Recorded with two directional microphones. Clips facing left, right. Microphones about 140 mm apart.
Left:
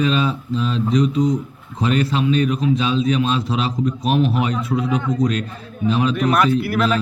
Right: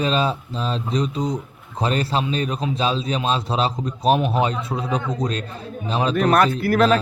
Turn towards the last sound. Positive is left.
turn(degrees=-40)  # may be behind; listen again after turning